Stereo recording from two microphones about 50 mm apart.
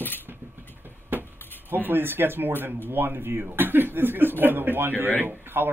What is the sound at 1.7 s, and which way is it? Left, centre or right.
Speech, right.